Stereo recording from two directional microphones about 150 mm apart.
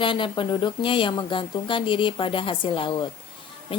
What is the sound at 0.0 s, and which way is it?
Speech, 35° left (ahead or behind).